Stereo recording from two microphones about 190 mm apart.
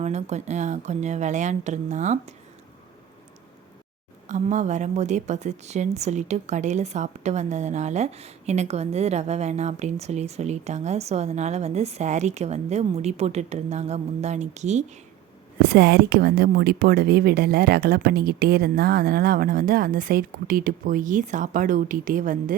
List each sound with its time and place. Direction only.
0.0 s a woman's voice: 35° right (ahead or behind)
4.3 s a woman's voice: 40° right (ahead or behind)
15.7 s a woman's voice: 55° right (ahead or behind)